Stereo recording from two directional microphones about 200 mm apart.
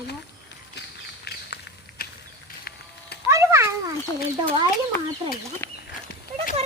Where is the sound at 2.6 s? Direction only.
55° left (ahead or behind).